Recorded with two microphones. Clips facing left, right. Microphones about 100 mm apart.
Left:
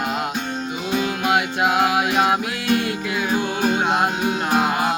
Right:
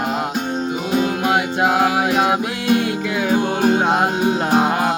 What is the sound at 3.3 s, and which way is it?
Music, 35° right (ahead or behind).